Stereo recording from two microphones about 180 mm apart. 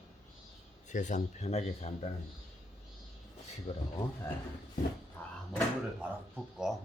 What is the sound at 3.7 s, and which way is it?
Speech, 35° left (ahead or behind).